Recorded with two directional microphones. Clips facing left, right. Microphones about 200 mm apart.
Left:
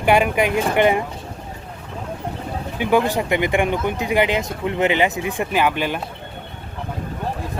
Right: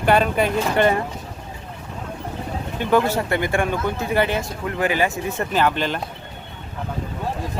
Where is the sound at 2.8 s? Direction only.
10° left (ahead or behind).